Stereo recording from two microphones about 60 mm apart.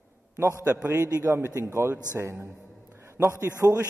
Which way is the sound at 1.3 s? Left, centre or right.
Right.